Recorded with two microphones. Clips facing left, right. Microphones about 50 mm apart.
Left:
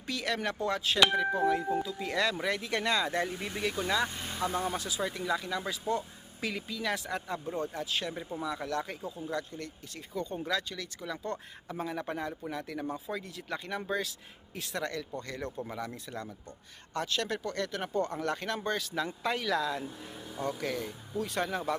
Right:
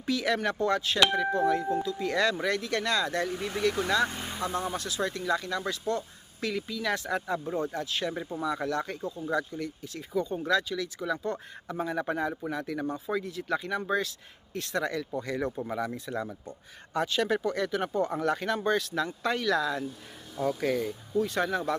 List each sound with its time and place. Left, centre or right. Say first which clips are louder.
0.0 s speech: right 5 dB; centre
2.4 s speech: right 2 dB; centre
4.4 s speech: even; centre